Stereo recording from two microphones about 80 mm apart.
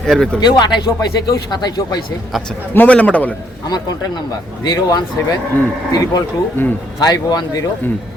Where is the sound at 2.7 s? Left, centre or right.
Centre.